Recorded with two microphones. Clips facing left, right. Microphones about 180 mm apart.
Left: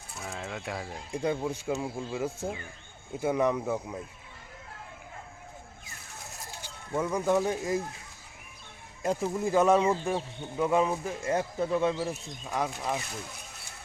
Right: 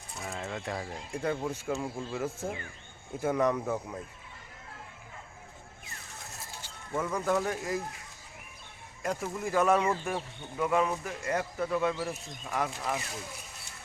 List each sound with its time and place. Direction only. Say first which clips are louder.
0.2 s speech: right 1 dB; centre (ahead or behind)
1.1 s speech: left 2 dB; 15° left (ahead or behind)
6.6 s speech: left 3 dB; 15° left (ahead or behind)
9.0 s speech: left 4 dB; 25° left (ahead or behind)